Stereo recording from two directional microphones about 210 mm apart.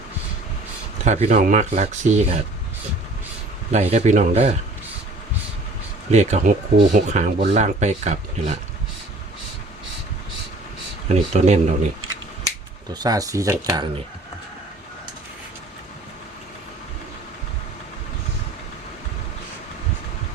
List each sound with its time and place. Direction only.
1.0 s speech: 30° right (ahead or behind)
3.7 s speech: 35° right (ahead or behind)
6.1 s speech: 30° right (ahead or behind)
11.1 s speech: 30° right (ahead or behind)
12.5 s speech: 20° right (ahead or behind)